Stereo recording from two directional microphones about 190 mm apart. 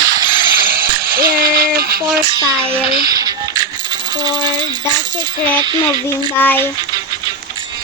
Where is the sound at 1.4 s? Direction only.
50° right (ahead or behind).